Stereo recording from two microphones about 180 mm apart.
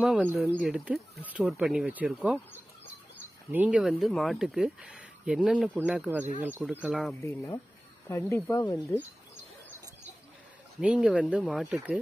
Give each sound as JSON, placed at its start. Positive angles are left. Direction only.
{"t": 0.0, "sound": "speech", "side_deg": 0}
{"t": 3.5, "sound": "speech", "side_deg": -5}
{"t": 7.2, "sound": "speech", "side_deg": 15}
{"t": 10.8, "sound": "speech", "side_deg": -5}